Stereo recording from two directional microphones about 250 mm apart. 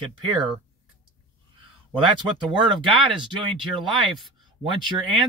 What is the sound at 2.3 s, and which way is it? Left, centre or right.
Speech, centre.